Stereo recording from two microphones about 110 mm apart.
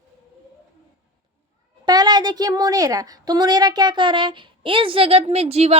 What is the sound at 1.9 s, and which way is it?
A woman's voice, 40° right (ahead or behind).